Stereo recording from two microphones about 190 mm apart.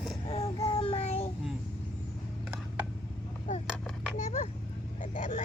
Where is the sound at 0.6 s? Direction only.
25° left (ahead or behind).